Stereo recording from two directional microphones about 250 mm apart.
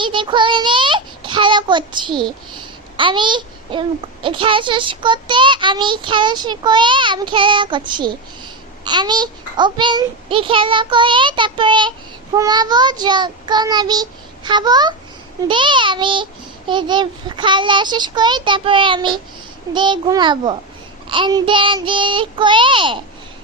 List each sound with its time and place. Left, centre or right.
0.0 s a child's voice: centre